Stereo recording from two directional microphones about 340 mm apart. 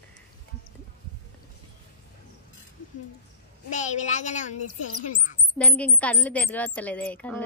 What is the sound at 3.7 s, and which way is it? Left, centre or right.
Speech, left.